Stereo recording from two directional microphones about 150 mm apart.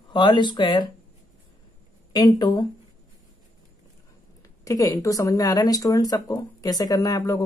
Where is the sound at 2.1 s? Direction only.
30° left (ahead or behind).